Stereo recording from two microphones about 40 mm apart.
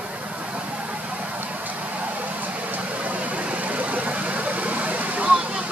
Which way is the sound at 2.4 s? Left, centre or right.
Right.